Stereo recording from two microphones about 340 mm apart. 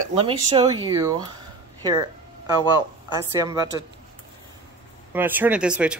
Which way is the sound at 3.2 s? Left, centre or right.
Centre.